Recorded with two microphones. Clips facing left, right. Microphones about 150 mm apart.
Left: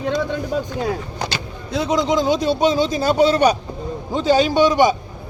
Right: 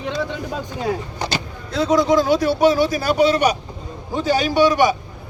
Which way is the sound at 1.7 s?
15° left (ahead or behind).